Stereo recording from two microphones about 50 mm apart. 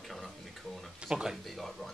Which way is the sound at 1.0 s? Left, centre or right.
Centre.